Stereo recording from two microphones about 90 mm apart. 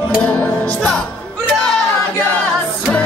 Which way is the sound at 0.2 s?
15° left (ahead or behind).